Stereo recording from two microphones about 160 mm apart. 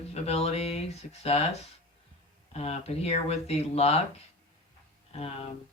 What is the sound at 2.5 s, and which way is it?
Mantra, 40° left (ahead or behind).